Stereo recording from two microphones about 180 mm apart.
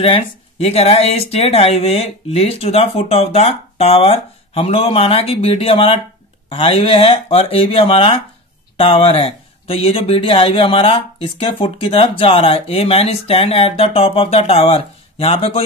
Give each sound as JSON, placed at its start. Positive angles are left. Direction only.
{"t": 0.0, "sound": "speech", "side_deg": 30}